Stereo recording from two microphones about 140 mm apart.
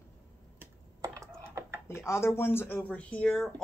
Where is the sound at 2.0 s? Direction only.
20° left (ahead or behind).